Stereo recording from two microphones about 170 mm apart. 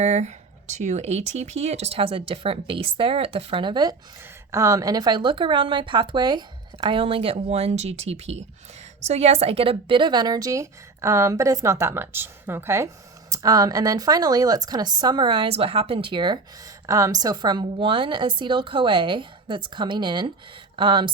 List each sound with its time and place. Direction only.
0.0 s speech: 40° right (ahead or behind)